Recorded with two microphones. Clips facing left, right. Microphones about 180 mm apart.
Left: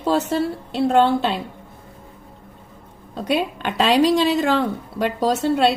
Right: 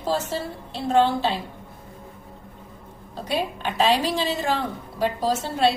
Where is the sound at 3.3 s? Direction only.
70° left (ahead or behind).